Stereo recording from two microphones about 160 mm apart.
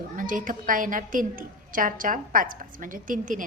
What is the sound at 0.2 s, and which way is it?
A woman's voice, 55° right (ahead or behind).